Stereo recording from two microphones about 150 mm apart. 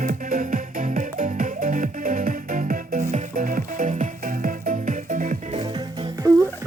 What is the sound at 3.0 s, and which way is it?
Music, 50° right (ahead or behind).